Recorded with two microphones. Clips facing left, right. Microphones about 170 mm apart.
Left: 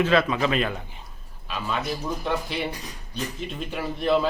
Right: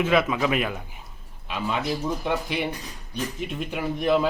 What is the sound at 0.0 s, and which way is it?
A man's voice, 10° right (ahead or behind).